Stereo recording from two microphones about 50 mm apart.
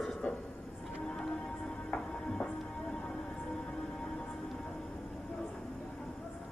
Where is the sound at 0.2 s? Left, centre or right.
Left.